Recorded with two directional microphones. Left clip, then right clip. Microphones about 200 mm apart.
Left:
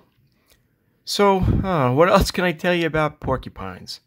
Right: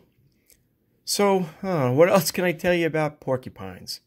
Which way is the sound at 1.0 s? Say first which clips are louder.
Left 4 dB; 20° left (ahead or behind).